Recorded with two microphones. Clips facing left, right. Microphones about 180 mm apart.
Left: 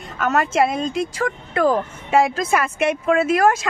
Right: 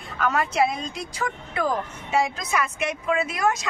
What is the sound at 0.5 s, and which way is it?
A woman's voice, 50° left (ahead or behind).